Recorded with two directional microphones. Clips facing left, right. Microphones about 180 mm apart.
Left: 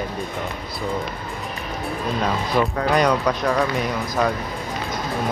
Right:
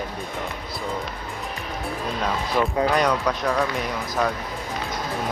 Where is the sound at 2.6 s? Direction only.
Centre (ahead or behind).